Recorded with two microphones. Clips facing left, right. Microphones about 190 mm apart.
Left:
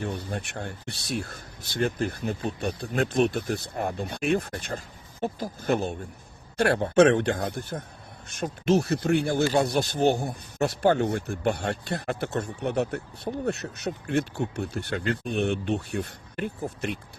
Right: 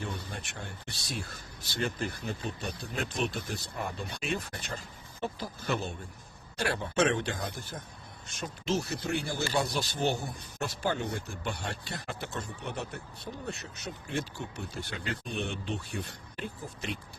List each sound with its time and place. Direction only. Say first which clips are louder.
0.0 s speech: left 7 dB; 60° left (ahead or behind)